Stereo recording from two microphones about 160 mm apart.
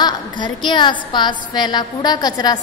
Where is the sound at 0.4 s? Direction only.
30° left (ahead or behind).